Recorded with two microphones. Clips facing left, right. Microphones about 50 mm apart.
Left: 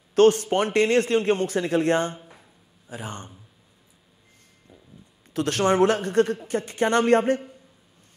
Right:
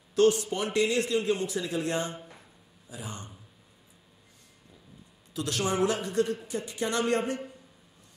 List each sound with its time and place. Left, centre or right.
0.1 s speech: left
2.1 s a sound: centre
2.9 s speech: left
5.3 s speech: left